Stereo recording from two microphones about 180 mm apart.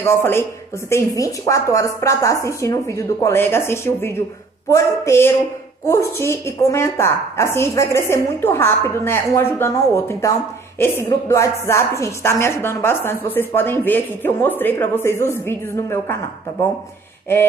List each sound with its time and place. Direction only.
0.0 s a woman's voice: 15° left (ahead or behind)